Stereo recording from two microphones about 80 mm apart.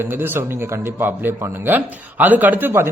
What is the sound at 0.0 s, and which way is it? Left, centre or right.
Speech, right.